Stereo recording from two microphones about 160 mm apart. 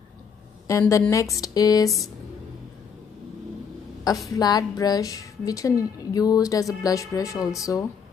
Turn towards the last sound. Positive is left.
turn(degrees=20)  # may be behind; listen again after turning